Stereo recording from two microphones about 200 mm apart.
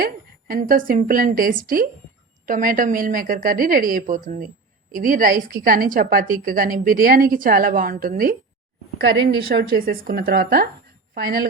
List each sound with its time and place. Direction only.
0.0 s a woman's voice: 45° right (ahead or behind)
9.0 s a woman's voice: 60° right (ahead or behind)